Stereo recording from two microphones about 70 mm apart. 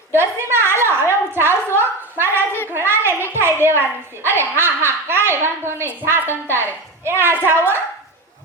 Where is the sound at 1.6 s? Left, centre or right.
Right.